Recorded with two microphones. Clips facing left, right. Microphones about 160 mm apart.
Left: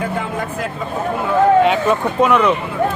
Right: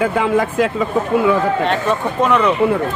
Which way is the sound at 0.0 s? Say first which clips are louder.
Right 6 dB; 90° right.